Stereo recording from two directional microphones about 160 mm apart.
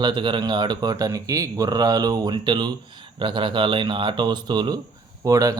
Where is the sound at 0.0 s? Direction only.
30° right (ahead or behind).